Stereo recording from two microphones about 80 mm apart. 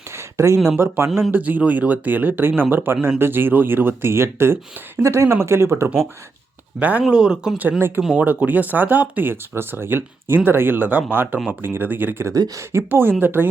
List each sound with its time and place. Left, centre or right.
0.1 s a sound: right
1.3 s speech: right
6.7 s speech: centre
7.8 s speech: right
8.0 s speech: centre
12.3 s speech: right
12.7 s speech: right